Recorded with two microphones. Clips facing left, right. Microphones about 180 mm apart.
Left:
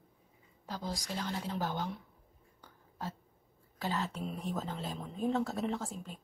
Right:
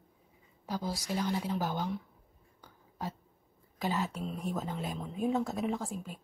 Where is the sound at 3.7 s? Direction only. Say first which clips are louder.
Right 3 dB; 15° right (ahead or behind).